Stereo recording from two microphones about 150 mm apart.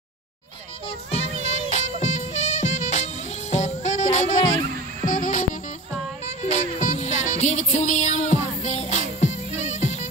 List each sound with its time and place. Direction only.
1.5 s music: 50° left (ahead or behind)